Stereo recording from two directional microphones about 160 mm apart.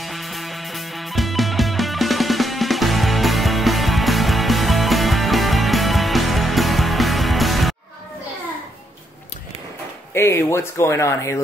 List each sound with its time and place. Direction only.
0.0 s music: centre (ahead or behind)
10.1 s speech: 15° left (ahead or behind)